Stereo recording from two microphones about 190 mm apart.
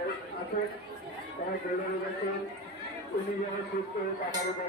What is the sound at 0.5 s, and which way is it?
Chatter, 50° left (ahead or behind).